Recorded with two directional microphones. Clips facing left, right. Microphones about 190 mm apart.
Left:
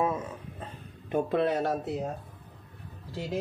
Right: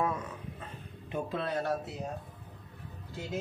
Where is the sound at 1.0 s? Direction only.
55° left (ahead or behind).